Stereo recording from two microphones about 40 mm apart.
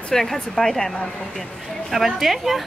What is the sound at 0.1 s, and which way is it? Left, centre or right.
A woman's voice, centre.